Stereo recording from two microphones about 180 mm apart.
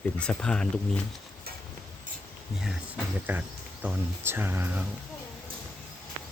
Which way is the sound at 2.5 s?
Centre (ahead or behind).